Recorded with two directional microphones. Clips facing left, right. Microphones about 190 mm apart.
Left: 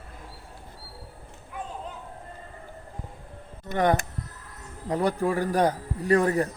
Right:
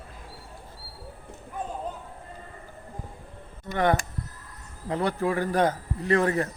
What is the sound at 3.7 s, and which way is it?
Speech, 15° left (ahead or behind).